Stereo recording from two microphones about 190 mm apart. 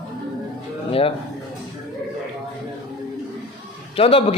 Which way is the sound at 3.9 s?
30° left (ahead or behind).